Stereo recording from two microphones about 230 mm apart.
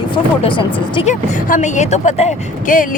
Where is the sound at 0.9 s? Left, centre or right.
Left.